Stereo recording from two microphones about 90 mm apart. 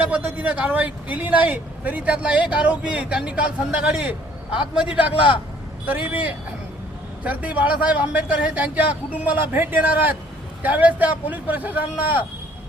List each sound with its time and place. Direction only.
0.0 s speech: 20° right (ahead or behind)
7.3 s speech: 15° right (ahead or behind)